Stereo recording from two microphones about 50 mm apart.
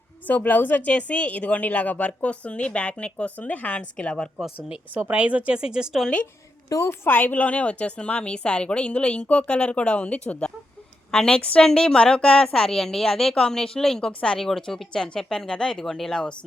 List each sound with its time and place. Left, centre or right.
0.3 s a woman's voice: left
0.9 s a woman's voice: left
5.1 s speech: right
6.7 s a woman's voice: left; by 16.3 s centre